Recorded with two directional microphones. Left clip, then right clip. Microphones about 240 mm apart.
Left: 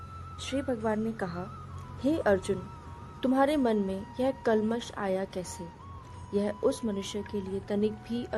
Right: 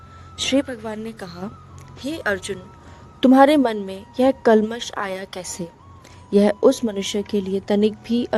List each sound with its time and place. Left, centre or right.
0.3 s speech: right
2.0 s a woman's voice: right